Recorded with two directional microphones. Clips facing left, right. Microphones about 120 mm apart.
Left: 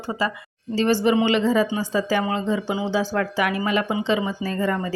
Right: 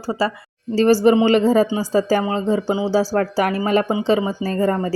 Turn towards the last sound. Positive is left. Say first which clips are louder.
# right 5 dB
turn(degrees=-35)  # may be behind; listen again after turning